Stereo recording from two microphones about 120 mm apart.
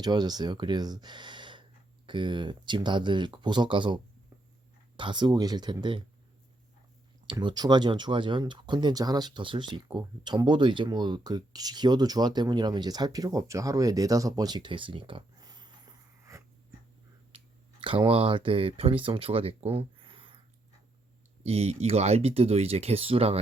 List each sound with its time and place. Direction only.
0.0 s speech: 35° right (ahead or behind)
7.3 s speech: 40° right (ahead or behind)
17.3 s speech: 45° right (ahead or behind)
21.4 s speech: 60° right (ahead or behind)